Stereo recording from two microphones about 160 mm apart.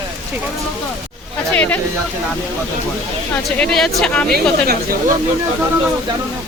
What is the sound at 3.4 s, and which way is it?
Speech, 5° left (ahead or behind).